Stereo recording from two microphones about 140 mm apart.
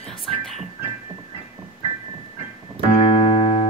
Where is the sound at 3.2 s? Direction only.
35° left (ahead or behind).